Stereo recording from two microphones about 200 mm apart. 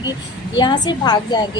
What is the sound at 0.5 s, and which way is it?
Speech, 20° left (ahead or behind).